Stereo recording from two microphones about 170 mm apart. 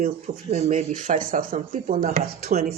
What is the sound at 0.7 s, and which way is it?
Speech, 50° right (ahead or behind).